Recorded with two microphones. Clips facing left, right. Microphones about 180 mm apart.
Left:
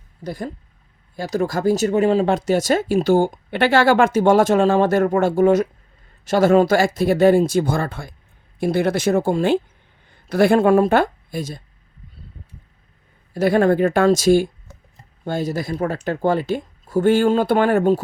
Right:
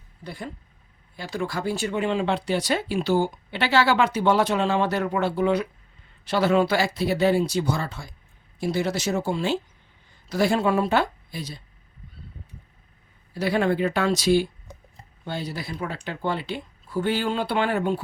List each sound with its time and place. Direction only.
0.3 s speech: 40° left (ahead or behind)
13.3 s speech: 50° left (ahead or behind)